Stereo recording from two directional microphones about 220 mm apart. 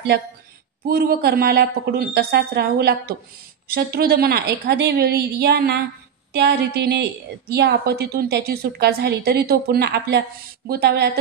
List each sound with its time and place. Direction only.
0.8 s a woman's voice: 45° right (ahead or behind)